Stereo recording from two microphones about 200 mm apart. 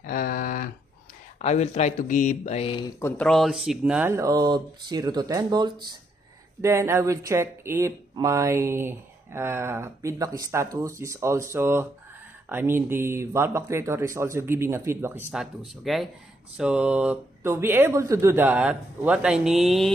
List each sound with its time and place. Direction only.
0.0 s a sound: 45° left (ahead or behind)
1.4 s speech: 35° left (ahead or behind)
3.0 s speech: 10° left (ahead or behind)